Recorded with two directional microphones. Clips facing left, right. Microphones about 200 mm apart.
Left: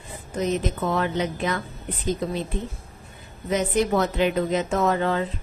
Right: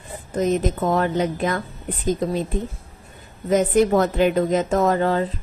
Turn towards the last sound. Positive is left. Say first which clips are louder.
# right 3 dB
turn(degrees=-40)  # may be behind; listen again after turning